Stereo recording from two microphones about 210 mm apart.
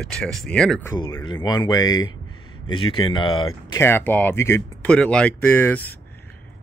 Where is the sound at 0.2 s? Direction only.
Centre (ahead or behind).